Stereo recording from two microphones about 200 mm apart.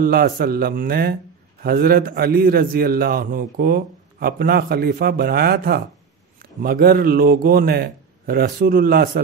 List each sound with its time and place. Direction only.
0.0 s a man's voice: 45° right (ahead or behind)